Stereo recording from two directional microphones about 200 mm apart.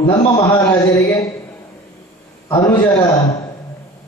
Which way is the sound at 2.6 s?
10° left (ahead or behind).